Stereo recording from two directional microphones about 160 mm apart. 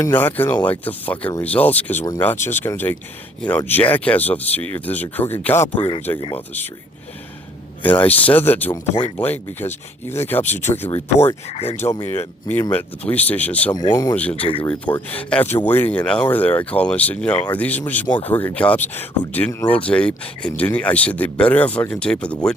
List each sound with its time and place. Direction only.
0.0 s speech: 10° left (ahead or behind)
5.6 s speech: 40° left (ahead or behind)
6.3 s speech: 10° left (ahead or behind)
7.8 s speech: 10° left (ahead or behind)
8.7 s speech: 30° left (ahead or behind)
9.1 s speech: 10° left (ahead or behind)
11.4 s speech: 40° left (ahead or behind)
12.0 s speech: 15° left (ahead or behind)
13.7 s speech: 25° left (ahead or behind)
14.3 s speech: 35° left (ahead or behind)
14.6 s speech: 10° left (ahead or behind)